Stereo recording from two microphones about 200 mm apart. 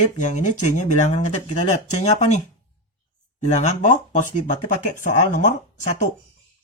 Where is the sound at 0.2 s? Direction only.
35° left (ahead or behind).